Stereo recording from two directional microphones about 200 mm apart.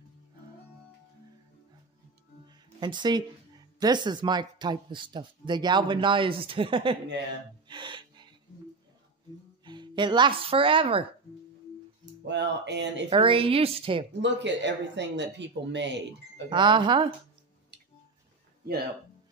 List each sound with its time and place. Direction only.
2.4 s music: 20° right (ahead or behind)
3.8 s speech: 20° right (ahead or behind)
7.6 s gasp: 25° right (ahead or behind)
9.7 s speech: 25° right (ahead or behind)
12.3 s speech: 60° right (ahead or behind)
13.1 s speech: 25° right (ahead or behind)
14.2 s speech: 60° right (ahead or behind)
16.4 s speech: 25° right (ahead or behind)